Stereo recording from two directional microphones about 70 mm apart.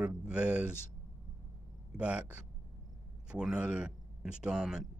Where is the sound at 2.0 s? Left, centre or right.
Centre.